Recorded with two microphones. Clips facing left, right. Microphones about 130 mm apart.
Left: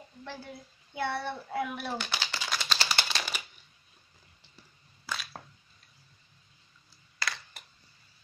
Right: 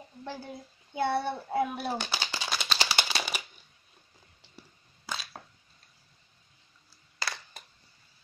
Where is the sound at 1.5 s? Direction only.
30° right (ahead or behind).